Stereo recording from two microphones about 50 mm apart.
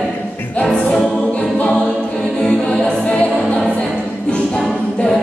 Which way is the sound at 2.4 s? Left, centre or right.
Centre.